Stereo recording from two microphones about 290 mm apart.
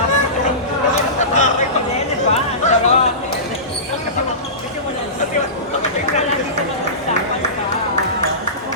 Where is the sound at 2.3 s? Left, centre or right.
Left.